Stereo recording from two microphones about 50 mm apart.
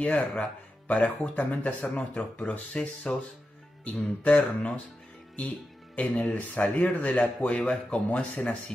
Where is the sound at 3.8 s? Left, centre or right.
Left.